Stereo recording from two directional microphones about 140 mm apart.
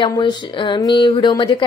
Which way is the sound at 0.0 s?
35° left (ahead or behind).